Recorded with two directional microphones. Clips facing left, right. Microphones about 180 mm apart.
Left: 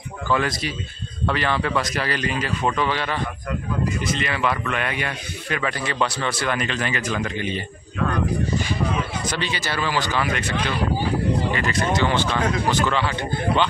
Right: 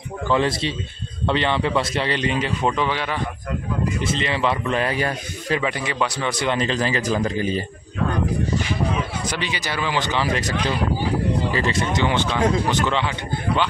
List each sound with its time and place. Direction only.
0.3 s a man's voice: 25° right (ahead or behind)
4.0 s a man's voice: 25° right (ahead or behind)
5.6 s a man's voice: 15° right (ahead or behind); by 7.6 s 35° right (ahead or behind)
9.3 s speech: 15° right (ahead or behind)
10.2 s speech: 30° right (ahead or behind)
11.5 s a man's voice: 25° right (ahead or behind)